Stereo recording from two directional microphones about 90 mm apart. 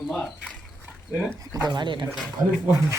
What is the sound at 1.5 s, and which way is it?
Speech, 50° right (ahead or behind).